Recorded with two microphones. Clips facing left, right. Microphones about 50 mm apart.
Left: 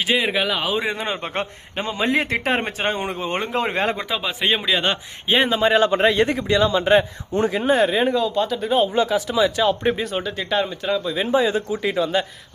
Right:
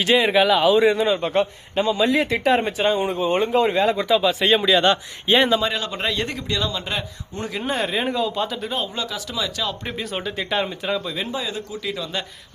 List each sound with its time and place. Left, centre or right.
0.0 s speech: centre
0.7 s a man's voice: centre
0.9 s a man's voice: left
3.9 s a man's voice: centre
5.5 s a man's voice: left
7.6 s speech: centre
8.7 s a man's voice: left
10.0 s speech: centre
11.3 s a man's voice: left